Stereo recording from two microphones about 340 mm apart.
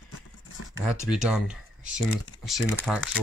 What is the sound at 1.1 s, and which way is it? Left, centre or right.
Speech, centre.